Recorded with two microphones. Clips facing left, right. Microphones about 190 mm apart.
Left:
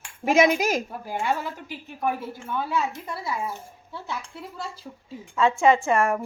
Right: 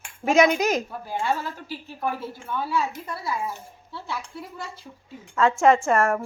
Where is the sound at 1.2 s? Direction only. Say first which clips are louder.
Even; 15° left (ahead or behind).